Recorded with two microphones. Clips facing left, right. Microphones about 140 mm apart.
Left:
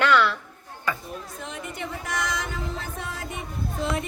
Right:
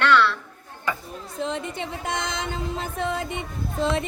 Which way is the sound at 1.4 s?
25° right (ahead or behind).